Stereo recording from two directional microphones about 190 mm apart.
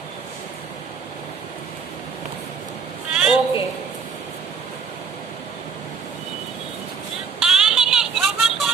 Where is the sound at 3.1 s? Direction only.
5° right (ahead or behind).